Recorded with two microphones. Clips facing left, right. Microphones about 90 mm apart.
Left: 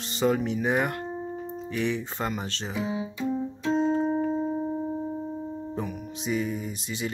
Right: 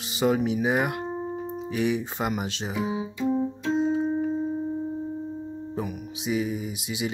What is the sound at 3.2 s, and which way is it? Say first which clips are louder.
Keyboard: right 5 dB; 15° right (ahead or behind).